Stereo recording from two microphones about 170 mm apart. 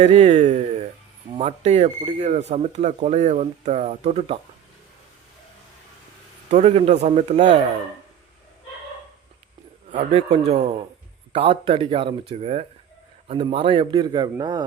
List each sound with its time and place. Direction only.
0.0 s speech: 40° right (ahead or behind)
6.5 s speech: 40° right (ahead or behind)
9.9 s a man's voice: 35° right (ahead or behind)